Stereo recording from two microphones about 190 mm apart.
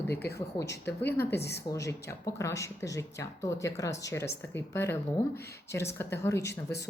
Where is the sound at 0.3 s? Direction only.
15° left (ahead or behind).